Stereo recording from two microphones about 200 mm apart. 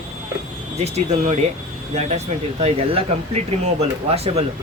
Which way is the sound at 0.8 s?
35° right (ahead or behind).